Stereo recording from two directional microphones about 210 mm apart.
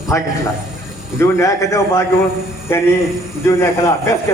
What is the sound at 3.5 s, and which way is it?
Speech, 15° left (ahead or behind).